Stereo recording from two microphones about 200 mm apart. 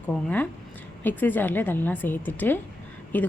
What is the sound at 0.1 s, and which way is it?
Speech, 5° left (ahead or behind).